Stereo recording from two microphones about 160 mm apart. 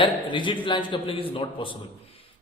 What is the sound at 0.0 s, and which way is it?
A man's voice, 30° left (ahead or behind).